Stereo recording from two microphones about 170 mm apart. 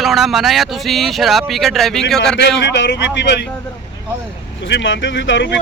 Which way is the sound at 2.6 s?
90° left.